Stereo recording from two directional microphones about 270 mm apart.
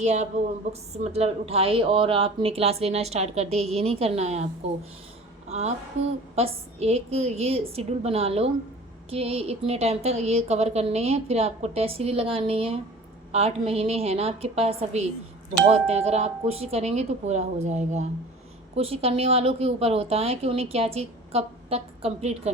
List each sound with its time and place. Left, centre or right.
0.0 s a woman's voice: right
5.5 s a woman's voice: right